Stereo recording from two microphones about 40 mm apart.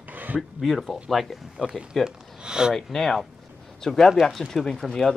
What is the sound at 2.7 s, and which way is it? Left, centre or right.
Speech, centre.